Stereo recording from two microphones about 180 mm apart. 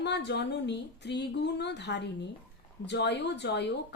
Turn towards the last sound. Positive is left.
turn(degrees=70)  # may be behind; listen again after turning